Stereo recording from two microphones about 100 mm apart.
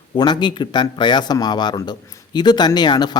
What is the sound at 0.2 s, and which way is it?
Speech, 50° left (ahead or behind).